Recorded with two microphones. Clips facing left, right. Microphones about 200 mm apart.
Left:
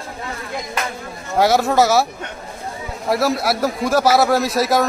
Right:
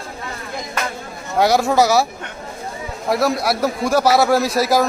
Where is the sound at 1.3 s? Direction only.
Centre (ahead or behind).